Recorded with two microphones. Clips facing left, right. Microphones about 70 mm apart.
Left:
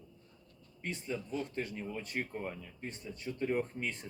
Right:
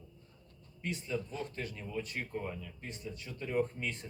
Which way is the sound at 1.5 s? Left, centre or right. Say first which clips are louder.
Left 1 dB; left.